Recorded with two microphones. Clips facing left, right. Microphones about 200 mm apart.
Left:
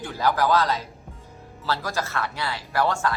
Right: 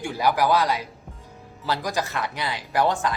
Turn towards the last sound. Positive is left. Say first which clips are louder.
# right 1 dB
turn(degrees=-15)  # may be behind; listen again after turning